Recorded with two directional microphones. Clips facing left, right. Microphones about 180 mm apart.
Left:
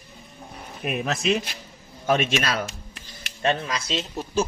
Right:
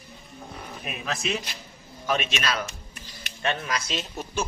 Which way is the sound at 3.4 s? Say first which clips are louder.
Left 4 dB; 30° left (ahead or behind).